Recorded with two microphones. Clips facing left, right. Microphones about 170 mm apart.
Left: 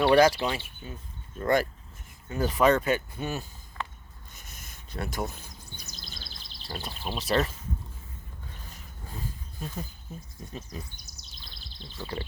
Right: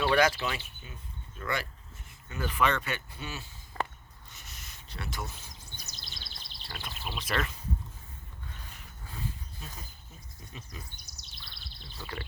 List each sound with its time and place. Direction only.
0.1 s speech: 35° left (ahead or behind)
1.4 s speech: 45° left (ahead or behind)
3.8 s a sound: 40° right (ahead or behind)
4.4 s bird vocalization: 50° left (ahead or behind)
8.7 s a sound: 40° left (ahead or behind)
10.7 s speech: 40° left (ahead or behind)
12.0 s speech: 35° left (ahead or behind)